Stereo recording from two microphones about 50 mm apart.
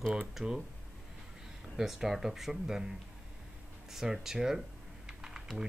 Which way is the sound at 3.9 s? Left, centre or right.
Centre.